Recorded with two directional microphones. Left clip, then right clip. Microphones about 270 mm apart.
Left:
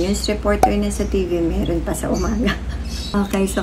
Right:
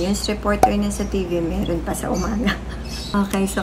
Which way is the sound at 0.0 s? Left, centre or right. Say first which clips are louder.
Left 2 dB; centre.